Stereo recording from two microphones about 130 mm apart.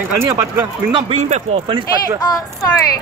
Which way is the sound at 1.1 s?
60° right (ahead or behind).